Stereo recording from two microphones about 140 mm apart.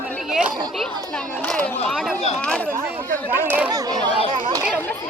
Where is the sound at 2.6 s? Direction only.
15° right (ahead or behind).